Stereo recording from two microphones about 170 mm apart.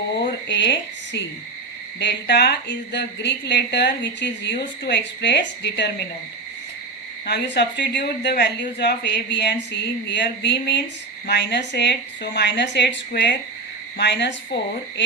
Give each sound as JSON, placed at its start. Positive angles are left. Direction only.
{"t": 0.4, "sound": "speech", "side_deg": 90}
{"t": 7.3, "sound": "speech", "side_deg": 90}
{"t": 8.8, "sound": "a woman's voice", "side_deg": 90}
{"t": 13.1, "sound": "speech", "side_deg": 80}
{"t": 14.0, "sound": "a woman's voice", "side_deg": 90}